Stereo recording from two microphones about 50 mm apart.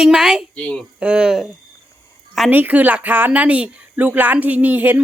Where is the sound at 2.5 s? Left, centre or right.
Right.